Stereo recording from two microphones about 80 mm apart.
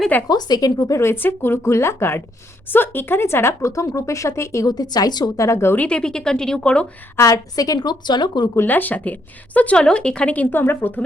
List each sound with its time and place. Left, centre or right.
0.3 s a woman's voice: left
0.9 s speech: left
4.6 s a woman's voice: left
5.4 s speech: left
5.7 s speech: centre
7.2 s a woman's voice: left
8.6 s speech: left